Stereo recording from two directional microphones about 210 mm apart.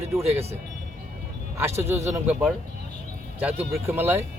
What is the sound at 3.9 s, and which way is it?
Speech, 10° right (ahead or behind).